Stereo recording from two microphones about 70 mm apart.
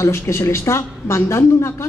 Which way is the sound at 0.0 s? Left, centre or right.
Left.